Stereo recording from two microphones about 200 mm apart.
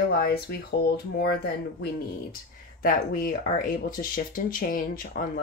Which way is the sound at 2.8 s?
45° left (ahead or behind).